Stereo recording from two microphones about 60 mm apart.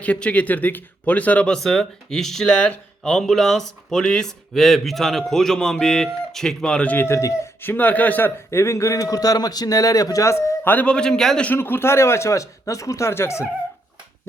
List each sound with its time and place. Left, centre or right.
0.0 s speech: left
1.5 s speech: centre
2.6 s speech: centre
3.1 s speech: centre
6.8 s speech: left
7.1 s speech: left
7.6 s speech: left
8.4 s a man's voice: left
10.6 s a man's voice: left
10.8 s speech: centre
11.5 s speech: left
13.1 s speech: left